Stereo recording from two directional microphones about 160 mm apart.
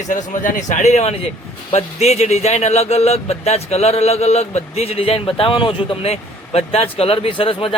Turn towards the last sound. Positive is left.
turn(degrees=35)  # may be behind; listen again after turning